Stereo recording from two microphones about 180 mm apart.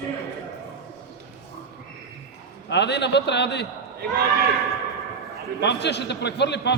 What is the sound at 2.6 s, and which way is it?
A man's voice, 70° left (ahead or behind).